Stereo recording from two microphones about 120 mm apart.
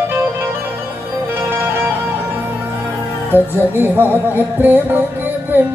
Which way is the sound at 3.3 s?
15° right (ahead or behind).